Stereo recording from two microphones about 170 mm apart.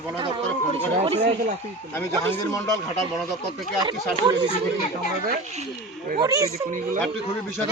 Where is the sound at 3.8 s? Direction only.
25° right (ahead or behind).